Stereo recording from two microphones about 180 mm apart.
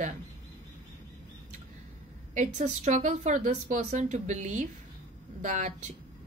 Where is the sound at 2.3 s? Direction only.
40° right (ahead or behind).